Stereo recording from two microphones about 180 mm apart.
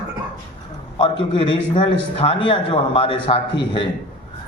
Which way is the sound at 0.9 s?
30° left (ahead or behind).